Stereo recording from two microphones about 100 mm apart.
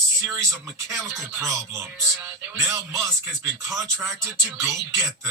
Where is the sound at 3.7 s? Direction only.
30° right (ahead or behind).